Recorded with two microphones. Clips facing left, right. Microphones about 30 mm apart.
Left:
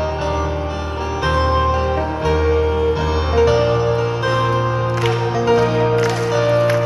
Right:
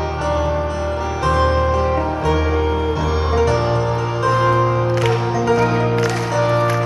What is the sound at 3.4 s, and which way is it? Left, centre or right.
Music, centre.